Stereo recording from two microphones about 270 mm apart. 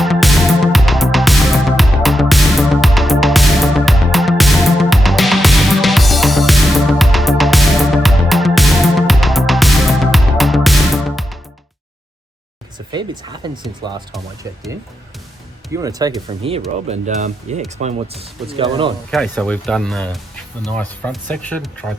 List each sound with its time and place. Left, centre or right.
0.0 s music: centre
12.9 s speech: centre
15.7 s speech: centre
19.1 s speech: centre